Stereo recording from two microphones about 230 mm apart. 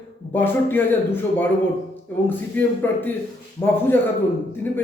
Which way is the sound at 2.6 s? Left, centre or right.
Centre.